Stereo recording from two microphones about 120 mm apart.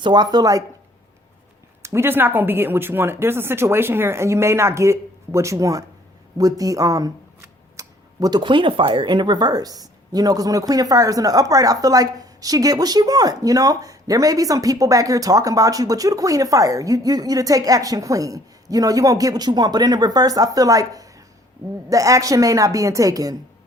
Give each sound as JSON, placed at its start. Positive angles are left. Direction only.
{"t": 0.0, "sound": "speech", "side_deg": -35}
{"t": 1.8, "sound": "speech", "side_deg": -20}